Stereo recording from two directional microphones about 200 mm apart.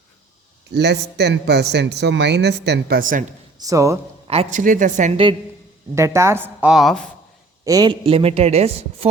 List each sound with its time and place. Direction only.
0.7 s speech: 55° right (ahead or behind)
3.6 s a woman's voice: 15° right (ahead or behind)
4.3 s a woman's voice: 35° right (ahead or behind)
5.9 s a woman's voice: 15° right (ahead or behind)
7.6 s a woman's voice: 20° right (ahead or behind)